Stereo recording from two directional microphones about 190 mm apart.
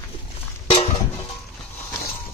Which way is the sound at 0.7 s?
30° left (ahead or behind).